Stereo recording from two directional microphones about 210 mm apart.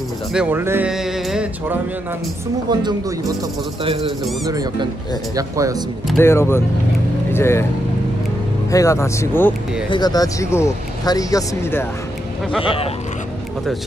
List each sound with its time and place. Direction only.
0.3 s speech: 5° right (ahead or behind)
2.7 s speech: 20° right (ahead or behind)
4.5 s speech: 15° right (ahead or behind)
6.1 s speech: 10° left (ahead or behind)
8.7 s speech: 15° left (ahead or behind)
12.6 s speech: 25° left (ahead or behind)